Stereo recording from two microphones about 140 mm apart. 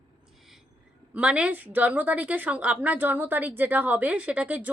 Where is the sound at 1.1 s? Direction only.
10° right (ahead or behind).